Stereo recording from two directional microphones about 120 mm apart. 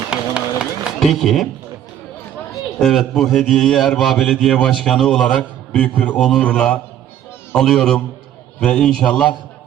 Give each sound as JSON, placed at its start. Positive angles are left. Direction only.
{"t": 0.1, "sound": "run", "side_deg": -5}
{"t": 2.7, "sound": "a man's voice", "side_deg": 0}
{"t": 6.1, "sound": "a man's voice", "side_deg": 0}